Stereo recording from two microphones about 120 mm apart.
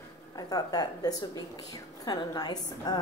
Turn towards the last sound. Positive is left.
turn(degrees=35)  # may be behind; listen again after turning